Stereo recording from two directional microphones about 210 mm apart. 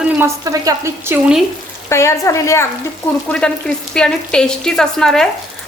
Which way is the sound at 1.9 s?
15° left (ahead or behind).